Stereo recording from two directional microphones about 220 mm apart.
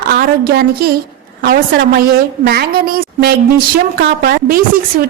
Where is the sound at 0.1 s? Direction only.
45° right (ahead or behind).